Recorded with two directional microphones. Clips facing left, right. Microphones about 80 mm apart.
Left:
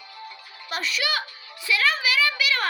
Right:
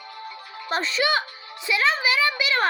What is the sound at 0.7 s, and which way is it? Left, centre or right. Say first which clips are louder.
A woman's voice: right 5 dB; right.